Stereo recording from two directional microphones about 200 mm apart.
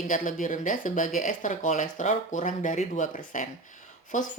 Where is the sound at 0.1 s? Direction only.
40° left (ahead or behind).